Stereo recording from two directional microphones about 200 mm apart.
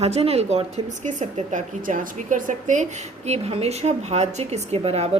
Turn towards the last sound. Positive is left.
turn(degrees=-30)  # may be behind; listen again after turning